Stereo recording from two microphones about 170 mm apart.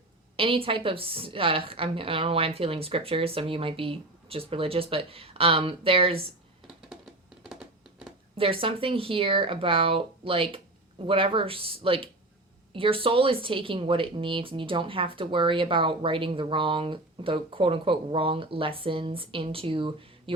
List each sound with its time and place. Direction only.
0.3 s speech: 30° right (ahead or behind)
7.4 s a sound: 5° right (ahead or behind)
8.4 s speech: 35° right (ahead or behind)